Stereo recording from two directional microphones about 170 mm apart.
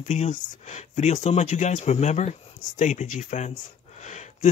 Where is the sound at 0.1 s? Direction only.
45° left (ahead or behind).